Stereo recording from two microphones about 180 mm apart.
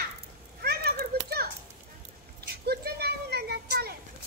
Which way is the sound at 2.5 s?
65° right (ahead or behind).